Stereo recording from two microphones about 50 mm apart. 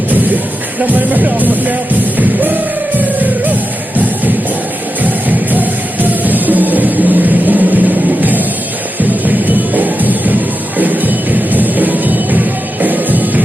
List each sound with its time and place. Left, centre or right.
0.8 s speech: right
2.1 s music: right
5.0 s music: right
8.2 s a sound: right
9.0 s music: right